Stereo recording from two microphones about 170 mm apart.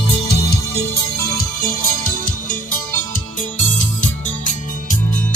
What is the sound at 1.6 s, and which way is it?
Music, 55° left (ahead or behind).